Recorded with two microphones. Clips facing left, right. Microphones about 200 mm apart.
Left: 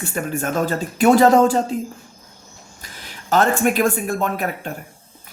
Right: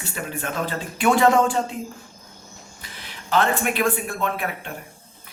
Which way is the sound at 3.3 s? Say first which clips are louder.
Left 4 dB; 45° left (ahead or behind).